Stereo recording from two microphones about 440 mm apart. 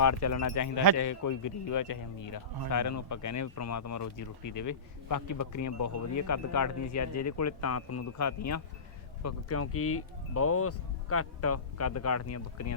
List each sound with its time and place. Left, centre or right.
0.0 s a man's voice: left